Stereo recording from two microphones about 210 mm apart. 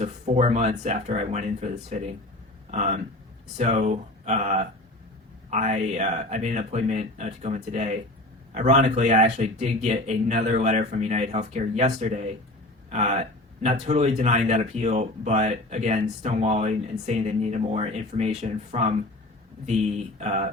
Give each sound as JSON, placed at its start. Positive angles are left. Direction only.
{"t": 0.0, "sound": "speech", "side_deg": -30}